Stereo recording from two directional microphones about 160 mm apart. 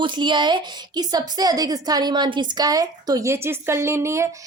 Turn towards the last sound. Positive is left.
turn(degrees=-20)  # may be behind; listen again after turning